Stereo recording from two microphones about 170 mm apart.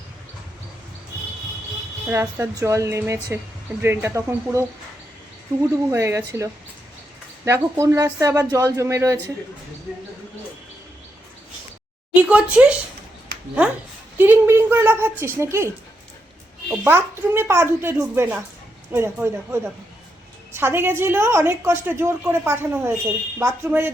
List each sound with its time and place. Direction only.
2.0 s a woman's voice: 15° right (ahead or behind)
5.9 s a woman's voice: 15° right (ahead or behind)
12.1 s a woman's voice: 10° right (ahead or behind)
14.2 s a woman's voice: 15° right (ahead or behind)